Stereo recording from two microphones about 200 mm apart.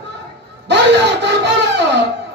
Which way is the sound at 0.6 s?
60° right (ahead or behind).